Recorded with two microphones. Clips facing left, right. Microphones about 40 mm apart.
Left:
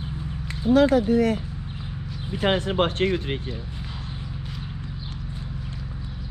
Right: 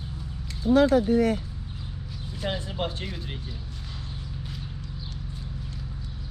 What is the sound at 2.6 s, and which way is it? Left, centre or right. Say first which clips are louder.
Speech: left 9 dB; left.